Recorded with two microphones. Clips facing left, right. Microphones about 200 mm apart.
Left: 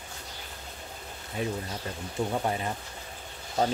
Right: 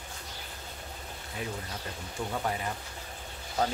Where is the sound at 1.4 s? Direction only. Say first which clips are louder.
Left 6 dB; 25° left (ahead or behind).